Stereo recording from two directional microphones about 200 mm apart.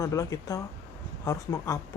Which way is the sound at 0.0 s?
15° left (ahead or behind).